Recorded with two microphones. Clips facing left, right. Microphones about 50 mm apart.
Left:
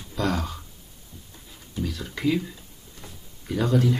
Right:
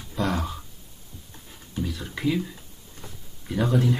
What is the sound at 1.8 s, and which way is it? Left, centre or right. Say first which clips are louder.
Speech: left 2 dB; centre.